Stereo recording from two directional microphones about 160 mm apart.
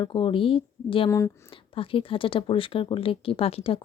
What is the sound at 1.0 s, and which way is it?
Speech, 20° left (ahead or behind).